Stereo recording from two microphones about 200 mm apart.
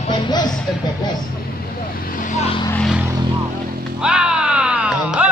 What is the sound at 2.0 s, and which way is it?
Vehicle, 40° left (ahead or behind).